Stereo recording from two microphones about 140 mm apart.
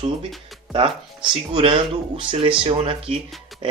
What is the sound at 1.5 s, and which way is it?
Speech, 40° right (ahead or behind).